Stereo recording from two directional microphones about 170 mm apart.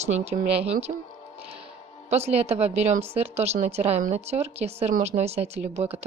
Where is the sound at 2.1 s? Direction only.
40° right (ahead or behind).